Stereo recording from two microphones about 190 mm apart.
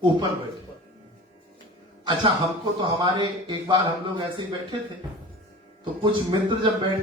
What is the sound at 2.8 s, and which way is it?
Speech, 25° right (ahead or behind).